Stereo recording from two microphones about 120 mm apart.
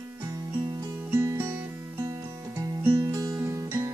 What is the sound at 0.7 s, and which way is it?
Music, 25° right (ahead or behind).